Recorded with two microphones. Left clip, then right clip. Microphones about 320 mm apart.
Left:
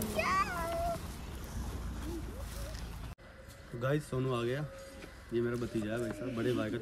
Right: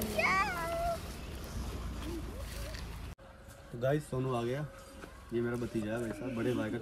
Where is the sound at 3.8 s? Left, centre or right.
Centre.